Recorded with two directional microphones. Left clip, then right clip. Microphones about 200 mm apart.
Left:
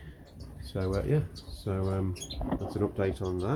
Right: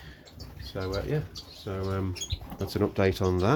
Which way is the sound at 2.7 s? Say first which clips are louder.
Right 6 dB; 35° right (ahead or behind).